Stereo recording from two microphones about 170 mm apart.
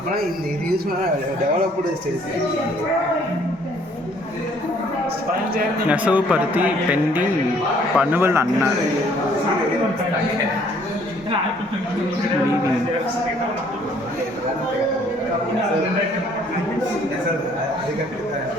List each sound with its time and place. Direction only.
5.9 s speech: 5° right (ahead or behind)